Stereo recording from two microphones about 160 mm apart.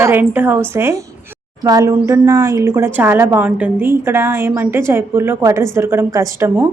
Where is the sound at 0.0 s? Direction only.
15° right (ahead or behind).